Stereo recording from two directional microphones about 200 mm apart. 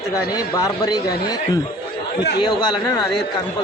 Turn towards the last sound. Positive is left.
turn(degrees=20)  # may be behind; listen again after turning